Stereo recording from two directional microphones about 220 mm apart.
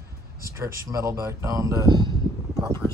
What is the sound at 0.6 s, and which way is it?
Speech, 15° right (ahead or behind).